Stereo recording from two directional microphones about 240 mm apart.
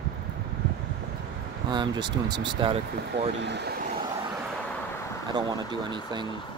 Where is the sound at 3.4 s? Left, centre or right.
Right.